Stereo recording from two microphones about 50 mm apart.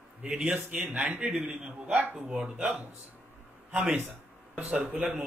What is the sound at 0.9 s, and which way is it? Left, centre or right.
Speech, right.